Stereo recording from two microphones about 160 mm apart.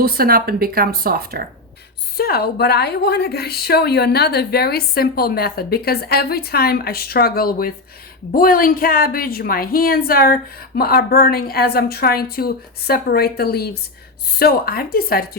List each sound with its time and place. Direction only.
0.0 s speech: 70° right (ahead or behind)
2.1 s a woman's voice: 75° left (ahead or behind)